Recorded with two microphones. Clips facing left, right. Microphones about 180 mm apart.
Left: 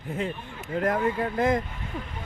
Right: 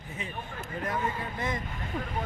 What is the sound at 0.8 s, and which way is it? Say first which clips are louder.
Speech: left 8 dB; 60° left (ahead or behind).